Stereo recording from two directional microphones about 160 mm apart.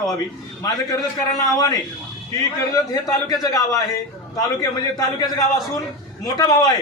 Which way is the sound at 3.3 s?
25° left (ahead or behind).